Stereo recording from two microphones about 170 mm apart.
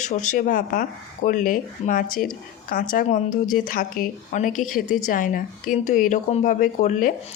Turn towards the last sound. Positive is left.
turn(degrees=50)  # may be behind; listen again after turning